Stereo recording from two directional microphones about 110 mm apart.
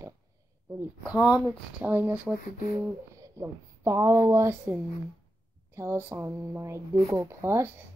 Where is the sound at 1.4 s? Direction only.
15° right (ahead or behind).